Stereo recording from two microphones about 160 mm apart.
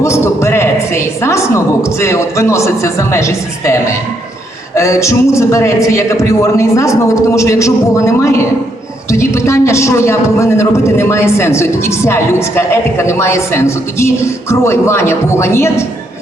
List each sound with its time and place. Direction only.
0.0 s a woman's voice: 15° left (ahead or behind)